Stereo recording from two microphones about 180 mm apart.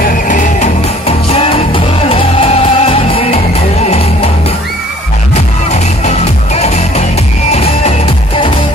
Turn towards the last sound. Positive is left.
turn(degrees=40)  # may be behind; listen again after turning